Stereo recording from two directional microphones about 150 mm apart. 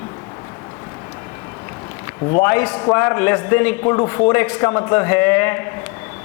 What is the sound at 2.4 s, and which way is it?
A man's voice, 10° left (ahead or behind).